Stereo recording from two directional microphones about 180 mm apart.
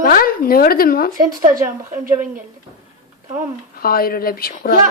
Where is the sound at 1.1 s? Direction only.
50° right (ahead or behind).